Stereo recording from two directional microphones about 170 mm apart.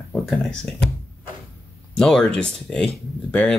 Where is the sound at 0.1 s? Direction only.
5° left (ahead or behind).